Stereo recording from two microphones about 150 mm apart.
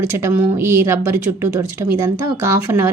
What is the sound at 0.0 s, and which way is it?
A woman's voice, 15° right (ahead or behind).